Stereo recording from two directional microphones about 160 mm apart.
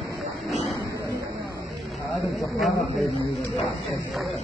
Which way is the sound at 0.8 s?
20° right (ahead or behind).